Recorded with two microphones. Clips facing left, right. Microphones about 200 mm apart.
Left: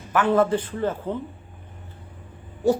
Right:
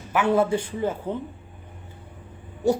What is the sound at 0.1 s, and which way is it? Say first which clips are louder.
A woman's voice: left 1 dB; 10° right (ahead or behind).